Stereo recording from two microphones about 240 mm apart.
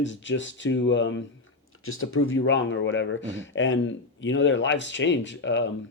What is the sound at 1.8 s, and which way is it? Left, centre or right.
Speech, left.